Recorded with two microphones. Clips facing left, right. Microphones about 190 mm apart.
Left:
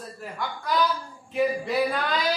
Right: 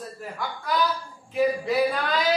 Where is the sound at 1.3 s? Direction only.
Centre (ahead or behind).